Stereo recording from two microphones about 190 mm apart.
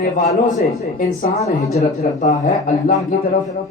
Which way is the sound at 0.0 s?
40° left (ahead or behind).